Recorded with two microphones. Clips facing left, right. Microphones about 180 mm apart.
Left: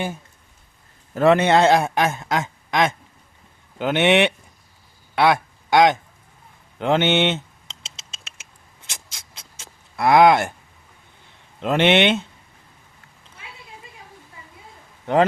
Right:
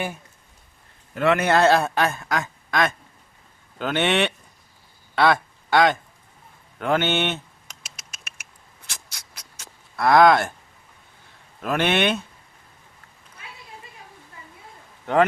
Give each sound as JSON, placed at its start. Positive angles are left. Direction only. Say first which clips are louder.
{"t": 1.1, "sound": "a man's voice", "louder": "left 5 dB", "side_deg": 35}
{"t": 1.5, "sound": "a man's voice", "louder": "left 2 dB", "side_deg": 20}
{"t": 6.7, "sound": "a sound", "louder": "left 4 dB", "side_deg": 20}
{"t": 11.6, "sound": "a man's voice", "louder": "left 4 dB", "side_deg": 20}